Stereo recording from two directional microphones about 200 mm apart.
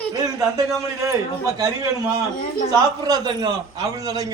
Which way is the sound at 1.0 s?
15° right (ahead or behind).